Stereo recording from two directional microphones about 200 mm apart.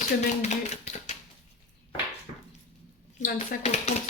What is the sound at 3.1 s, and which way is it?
Speech, 40° left (ahead or behind).